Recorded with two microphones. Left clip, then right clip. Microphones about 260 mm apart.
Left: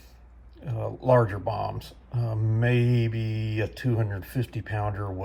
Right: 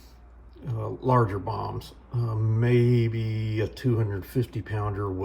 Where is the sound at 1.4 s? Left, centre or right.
Right.